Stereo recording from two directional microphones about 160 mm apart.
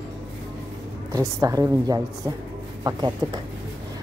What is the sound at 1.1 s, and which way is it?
Speech, 20° right (ahead or behind).